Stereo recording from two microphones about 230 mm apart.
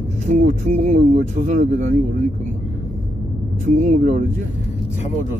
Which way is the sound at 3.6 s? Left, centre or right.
Right.